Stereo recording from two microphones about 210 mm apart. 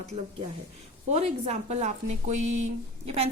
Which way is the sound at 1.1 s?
30° right (ahead or behind).